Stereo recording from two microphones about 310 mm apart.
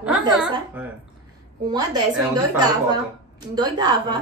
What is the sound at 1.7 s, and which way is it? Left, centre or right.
A woman's voice, centre.